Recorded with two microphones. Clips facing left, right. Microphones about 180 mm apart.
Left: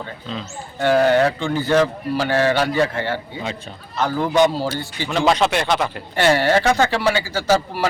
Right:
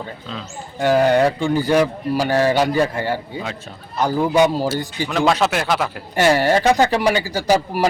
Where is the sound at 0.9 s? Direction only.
15° right (ahead or behind).